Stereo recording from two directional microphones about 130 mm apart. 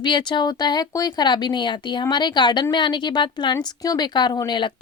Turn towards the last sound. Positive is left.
turn(degrees=35)  # may be behind; listen again after turning